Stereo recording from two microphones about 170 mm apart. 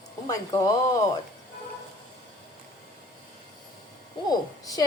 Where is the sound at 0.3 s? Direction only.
20° left (ahead or behind).